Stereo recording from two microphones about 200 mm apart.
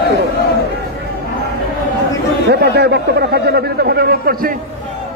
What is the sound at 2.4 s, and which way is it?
A man's voice, 55° right (ahead or behind).